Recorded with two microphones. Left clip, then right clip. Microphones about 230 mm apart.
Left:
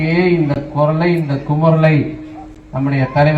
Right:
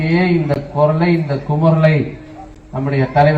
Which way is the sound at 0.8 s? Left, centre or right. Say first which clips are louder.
Even; left.